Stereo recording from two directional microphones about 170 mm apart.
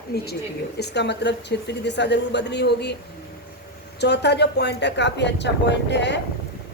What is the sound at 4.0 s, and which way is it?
A woman's voice, 80° left.